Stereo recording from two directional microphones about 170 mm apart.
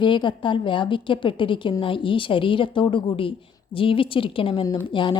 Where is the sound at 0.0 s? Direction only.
30° left (ahead or behind).